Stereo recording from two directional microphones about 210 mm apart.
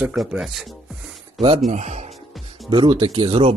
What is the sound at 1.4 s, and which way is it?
Speech, 30° right (ahead or behind).